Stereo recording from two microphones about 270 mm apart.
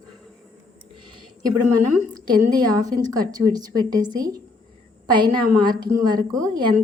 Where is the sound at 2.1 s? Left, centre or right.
Centre.